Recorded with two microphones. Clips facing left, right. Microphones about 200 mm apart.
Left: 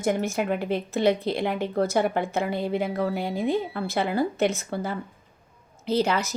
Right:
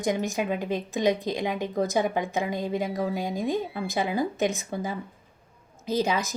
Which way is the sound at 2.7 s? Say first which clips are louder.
Left 2 dB; 65° left (ahead or behind).